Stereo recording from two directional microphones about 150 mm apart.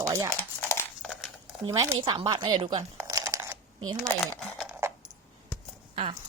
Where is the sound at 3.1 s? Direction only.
20° right (ahead or behind).